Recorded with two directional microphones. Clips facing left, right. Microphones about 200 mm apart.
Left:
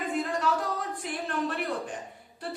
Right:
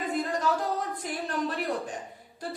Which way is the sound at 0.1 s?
40° right (ahead or behind).